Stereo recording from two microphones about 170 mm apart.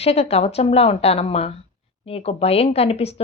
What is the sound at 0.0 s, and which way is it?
A woman's voice, 35° left (ahead or behind).